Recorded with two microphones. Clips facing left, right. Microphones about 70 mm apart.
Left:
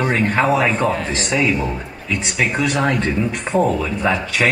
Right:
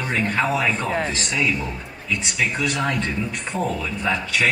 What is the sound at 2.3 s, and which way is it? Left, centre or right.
A man's voice, left.